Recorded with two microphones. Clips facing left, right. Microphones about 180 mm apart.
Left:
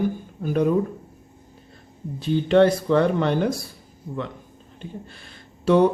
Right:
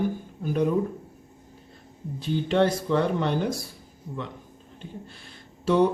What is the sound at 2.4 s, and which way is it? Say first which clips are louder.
Speech: left 6 dB; 70° left (ahead or behind).